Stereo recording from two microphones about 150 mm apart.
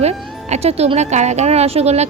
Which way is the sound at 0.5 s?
45° right (ahead or behind).